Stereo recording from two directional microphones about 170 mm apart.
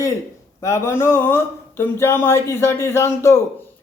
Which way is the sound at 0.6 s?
15° left (ahead or behind).